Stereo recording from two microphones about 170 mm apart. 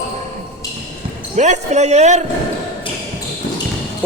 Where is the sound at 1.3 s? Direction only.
45° right (ahead or behind).